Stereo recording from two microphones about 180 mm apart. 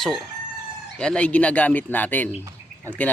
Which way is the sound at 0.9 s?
5° left (ahead or behind).